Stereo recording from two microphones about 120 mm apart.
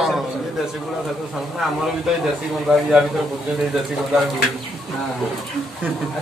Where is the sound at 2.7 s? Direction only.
5° right (ahead or behind).